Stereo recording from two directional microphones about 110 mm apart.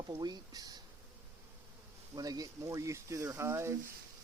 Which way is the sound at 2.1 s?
35° right (ahead or behind).